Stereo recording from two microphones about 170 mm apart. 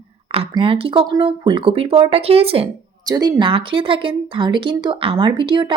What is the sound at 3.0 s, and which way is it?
Speech, 20° right (ahead or behind).